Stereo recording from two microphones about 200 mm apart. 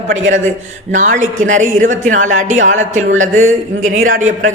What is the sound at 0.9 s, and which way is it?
Speech, 40° right (ahead or behind).